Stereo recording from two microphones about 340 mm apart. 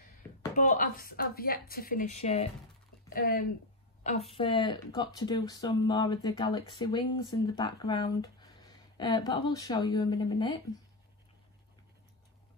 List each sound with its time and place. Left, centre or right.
0.6 s a woman's voice: left
4.3 s speech: centre